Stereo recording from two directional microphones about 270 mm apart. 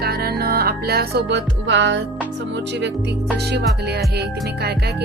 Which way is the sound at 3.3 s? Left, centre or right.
Right.